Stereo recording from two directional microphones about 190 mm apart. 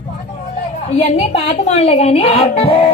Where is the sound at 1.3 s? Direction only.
35° left (ahead or behind).